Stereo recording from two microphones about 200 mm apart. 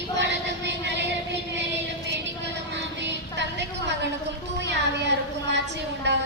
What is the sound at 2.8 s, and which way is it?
Child singing, 60° right (ahead or behind).